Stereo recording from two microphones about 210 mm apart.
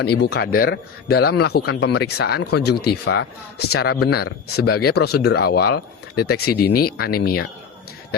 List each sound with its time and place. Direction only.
0.0 s speech: 50° left (ahead or behind)